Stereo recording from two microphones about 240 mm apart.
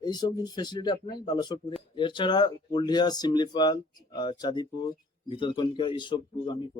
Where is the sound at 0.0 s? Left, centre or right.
Centre.